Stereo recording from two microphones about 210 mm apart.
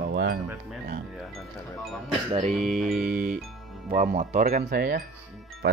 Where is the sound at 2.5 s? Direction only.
Centre (ahead or behind).